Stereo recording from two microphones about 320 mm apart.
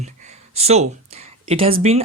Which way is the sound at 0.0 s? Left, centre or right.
Right.